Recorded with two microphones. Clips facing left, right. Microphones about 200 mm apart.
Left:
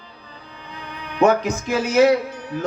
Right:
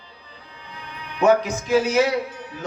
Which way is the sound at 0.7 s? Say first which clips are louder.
Left 4 dB; 55° left (ahead or behind).